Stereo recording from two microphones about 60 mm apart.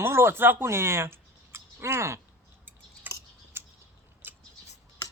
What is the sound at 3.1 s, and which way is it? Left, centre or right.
Tick-tock, right.